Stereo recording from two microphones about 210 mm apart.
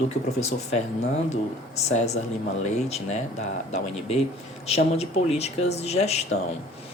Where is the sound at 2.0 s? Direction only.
30° left (ahead or behind).